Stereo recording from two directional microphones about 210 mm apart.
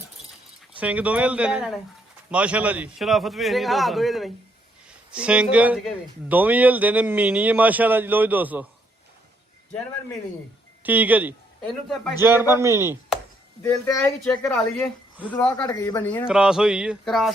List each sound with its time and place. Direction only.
0.8 s a man's voice: 5° right (ahead or behind)
10.8 s a man's voice: 10° right (ahead or behind)
11.6 s a man's voice: 5° left (ahead or behind)
12.1 s a man's voice: 10° right (ahead or behind)
13.6 s a man's voice: 10° left (ahead or behind)
15.6 s speech: 20° left (ahead or behind)
16.2 s a man's voice: 5° right (ahead or behind)